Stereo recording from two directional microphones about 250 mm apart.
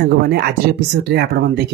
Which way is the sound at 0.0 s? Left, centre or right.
Right.